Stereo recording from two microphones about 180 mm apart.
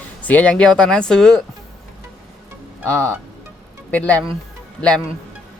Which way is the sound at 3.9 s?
10° left (ahead or behind).